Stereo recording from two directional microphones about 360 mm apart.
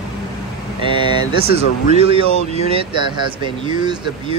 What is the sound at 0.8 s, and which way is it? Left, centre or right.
Speech, centre.